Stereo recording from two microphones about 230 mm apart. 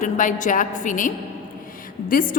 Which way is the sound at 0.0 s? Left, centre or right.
Left.